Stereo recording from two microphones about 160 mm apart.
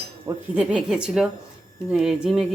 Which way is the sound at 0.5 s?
5° right (ahead or behind).